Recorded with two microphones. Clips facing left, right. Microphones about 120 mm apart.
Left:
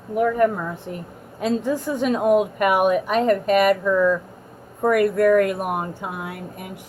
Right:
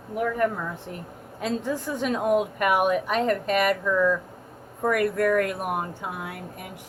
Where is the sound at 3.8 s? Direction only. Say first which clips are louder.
Left 4 dB; 30° left (ahead or behind).